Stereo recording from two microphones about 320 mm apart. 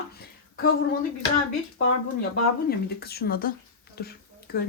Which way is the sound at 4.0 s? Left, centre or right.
Left.